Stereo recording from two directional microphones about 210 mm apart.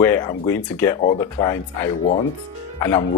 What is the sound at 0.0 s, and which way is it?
Speech, 15° left (ahead or behind).